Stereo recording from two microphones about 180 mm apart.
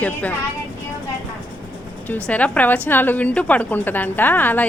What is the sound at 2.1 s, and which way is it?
A woman's voice, 10° left (ahead or behind).